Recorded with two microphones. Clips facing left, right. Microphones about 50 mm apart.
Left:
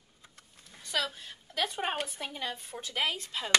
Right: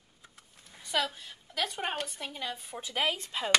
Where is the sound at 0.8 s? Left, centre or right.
Centre.